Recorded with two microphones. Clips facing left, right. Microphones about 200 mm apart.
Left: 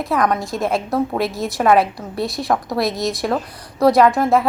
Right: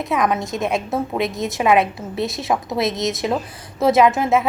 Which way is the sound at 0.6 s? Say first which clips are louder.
Left 2 dB; centre (ahead or behind).